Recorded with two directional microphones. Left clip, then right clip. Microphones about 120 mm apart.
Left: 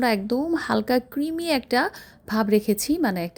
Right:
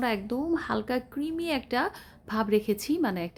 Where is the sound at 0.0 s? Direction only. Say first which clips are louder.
Left 6 dB; 45° left (ahead or behind).